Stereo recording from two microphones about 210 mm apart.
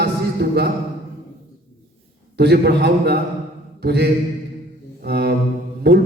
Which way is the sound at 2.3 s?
50° right (ahead or behind).